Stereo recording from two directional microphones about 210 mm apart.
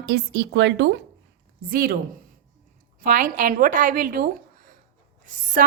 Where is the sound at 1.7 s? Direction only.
45° right (ahead or behind).